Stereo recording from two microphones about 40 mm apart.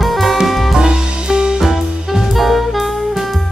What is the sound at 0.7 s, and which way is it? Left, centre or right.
Music, centre.